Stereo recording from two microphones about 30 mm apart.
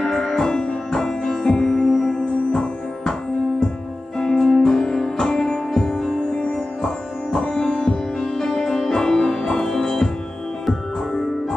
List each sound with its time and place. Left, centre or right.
0.0 s music: centre
1.7 s music: centre
4.2 s music: centre
5.8 s music: centre
7.6 s music: left